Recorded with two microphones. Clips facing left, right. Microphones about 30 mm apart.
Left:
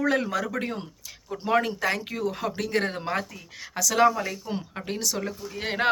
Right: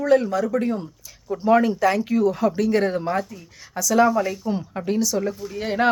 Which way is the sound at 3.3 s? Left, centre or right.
Left.